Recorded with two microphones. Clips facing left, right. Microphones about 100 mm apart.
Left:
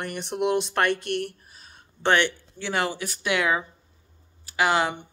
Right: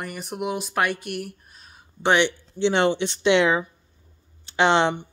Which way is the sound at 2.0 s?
15° right (ahead or behind).